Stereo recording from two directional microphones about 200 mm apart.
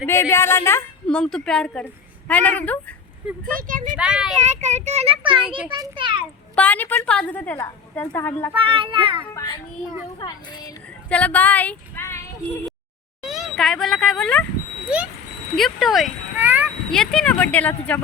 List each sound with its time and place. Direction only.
0.0 s a woman's voice: 10° left (ahead or behind)
3.4 s speech: 45° right (ahead or behind)
3.9 s speech: 5° right (ahead or behind)
4.4 s a child's voice: 35° right (ahead or behind)
6.6 s a woman's voice: 10° left (ahead or behind)
8.5 s a child's voice: 25° right (ahead or behind)
9.3 s a woman's voice: 15° left (ahead or behind)
11.1 s a woman's voice: 5° left (ahead or behind)
13.2 s speech: centre (ahead or behind)
15.5 s speech: centre (ahead or behind)
16.9 s a woman's voice: centre (ahead or behind)